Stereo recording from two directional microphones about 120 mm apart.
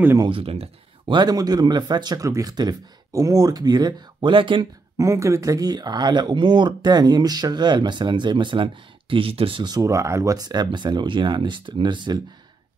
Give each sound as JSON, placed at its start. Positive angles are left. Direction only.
{"t": 0.2, "sound": "speech", "side_deg": -50}
{"t": 4.9, "sound": "speech", "side_deg": -25}